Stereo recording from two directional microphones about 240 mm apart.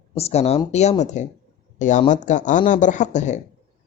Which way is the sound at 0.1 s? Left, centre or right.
Left.